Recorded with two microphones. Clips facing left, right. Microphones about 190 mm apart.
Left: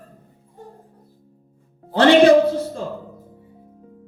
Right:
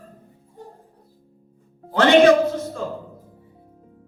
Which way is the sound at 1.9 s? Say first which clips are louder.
Left 1 dB; 30° left (ahead or behind).